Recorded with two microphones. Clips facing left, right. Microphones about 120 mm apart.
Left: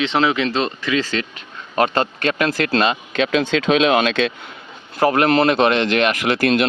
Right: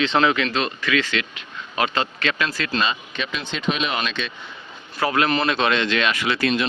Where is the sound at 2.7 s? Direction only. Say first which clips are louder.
Left 6 dB; 75° left (ahead or behind); by 4.3 s 90° left.